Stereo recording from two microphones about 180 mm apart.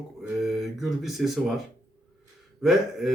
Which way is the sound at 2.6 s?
Centre (ahead or behind).